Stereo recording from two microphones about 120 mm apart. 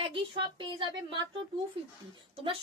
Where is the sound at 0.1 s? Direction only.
45° right (ahead or behind).